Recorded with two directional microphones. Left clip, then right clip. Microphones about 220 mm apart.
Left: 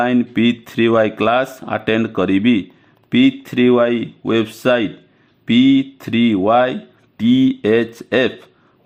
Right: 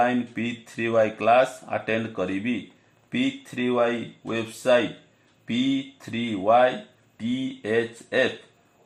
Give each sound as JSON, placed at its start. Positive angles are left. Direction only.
{"t": 0.0, "sound": "speech", "side_deg": 30}